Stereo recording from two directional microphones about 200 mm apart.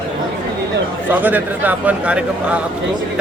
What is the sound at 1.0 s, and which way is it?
A man's voice, 10° right (ahead or behind).